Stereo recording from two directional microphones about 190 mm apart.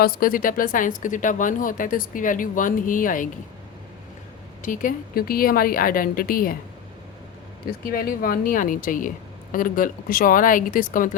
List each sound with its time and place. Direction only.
0.0 s a woman's voice: 50° left (ahead or behind)
4.6 s a woman's voice: 45° left (ahead or behind)
7.9 s a woman's voice: 50° left (ahead or behind)